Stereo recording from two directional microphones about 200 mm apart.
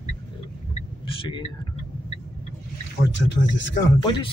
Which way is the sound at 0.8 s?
25° left (ahead or behind).